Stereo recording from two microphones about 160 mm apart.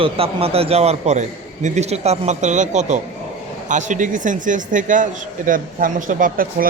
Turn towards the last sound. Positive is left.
turn(degrees=-60)  # may be behind; listen again after turning